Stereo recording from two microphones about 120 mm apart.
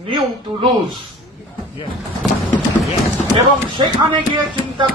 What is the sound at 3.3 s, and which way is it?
Speech, 40° right (ahead or behind).